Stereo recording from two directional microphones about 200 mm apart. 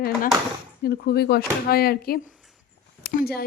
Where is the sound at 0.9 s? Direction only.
50° left (ahead or behind).